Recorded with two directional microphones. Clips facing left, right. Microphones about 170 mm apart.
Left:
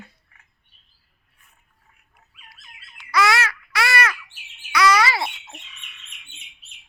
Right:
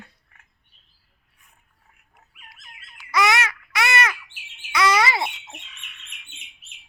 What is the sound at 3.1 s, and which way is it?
Babbling, 20° right (ahead or behind).